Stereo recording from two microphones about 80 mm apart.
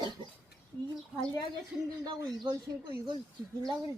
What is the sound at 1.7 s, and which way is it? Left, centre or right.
Speech, centre.